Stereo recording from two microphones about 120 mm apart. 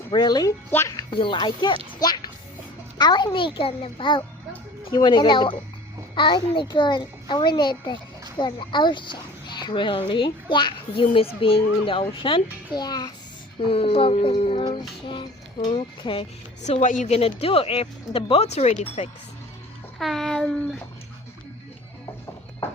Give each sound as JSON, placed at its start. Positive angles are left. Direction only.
{"t": 0.1, "sound": "a child's voice", "side_deg": 35}
{"t": 0.7, "sound": "a woman's voice", "side_deg": 25}
{"t": 1.2, "sound": "a child's voice", "side_deg": 40}
{"t": 2.0, "sound": "music", "side_deg": 35}
{"t": 3.0, "sound": "a child's voice", "side_deg": 40}
{"t": 13.7, "sound": "a child's voice", "side_deg": 50}
{"t": 14.6, "sound": "a child's voice", "side_deg": 40}
{"t": 16.6, "sound": "a woman's voice", "side_deg": 80}
{"t": 17.2, "sound": "speech", "side_deg": 55}
{"t": 20.0, "sound": "a sound", "side_deg": 0}